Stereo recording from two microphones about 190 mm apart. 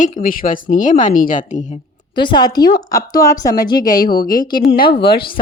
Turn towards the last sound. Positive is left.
turn(degrees=55)  # may be behind; listen again after turning